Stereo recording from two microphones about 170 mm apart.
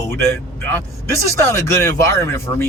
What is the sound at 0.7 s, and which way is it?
Speech, 15° left (ahead or behind).